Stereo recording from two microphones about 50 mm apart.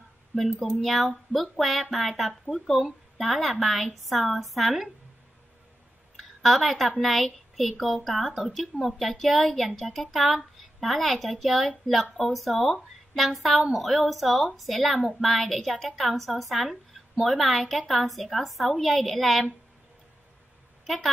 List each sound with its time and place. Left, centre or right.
0.7 s speech: centre
6.1 s a sound: centre
7.0 s speech: centre
20.8 s speech: centre